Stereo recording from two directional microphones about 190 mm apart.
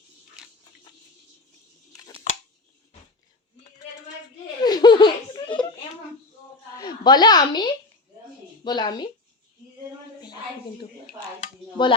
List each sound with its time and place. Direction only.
4.6 s laughter: 20° left (ahead or behind)
6.7 s a woman's voice: 20° left (ahead or behind)
11.8 s speech: 25° left (ahead or behind)